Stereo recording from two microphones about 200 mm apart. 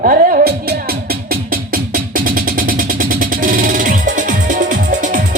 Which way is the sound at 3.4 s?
45° right (ahead or behind).